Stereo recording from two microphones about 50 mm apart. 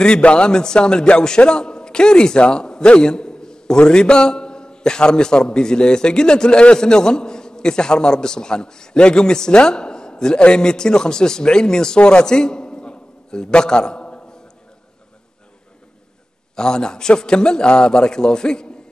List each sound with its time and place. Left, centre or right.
0.0 s a man's voice: centre
16.5 s a man's voice: centre